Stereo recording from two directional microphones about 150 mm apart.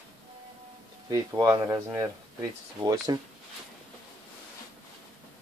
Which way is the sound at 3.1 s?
25° right (ahead or behind).